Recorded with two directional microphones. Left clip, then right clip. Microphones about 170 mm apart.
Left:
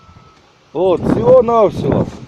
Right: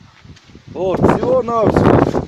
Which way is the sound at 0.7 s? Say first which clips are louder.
Left 1 dB; 30° left (ahead or behind).